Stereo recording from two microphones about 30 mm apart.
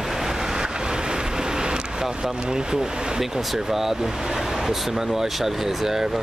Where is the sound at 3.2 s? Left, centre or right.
Centre.